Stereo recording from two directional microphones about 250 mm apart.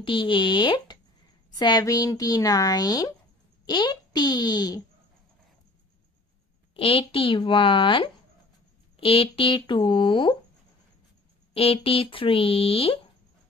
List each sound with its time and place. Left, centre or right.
0.0 s speech: left
6.7 s speech: left
11.5 s speech: left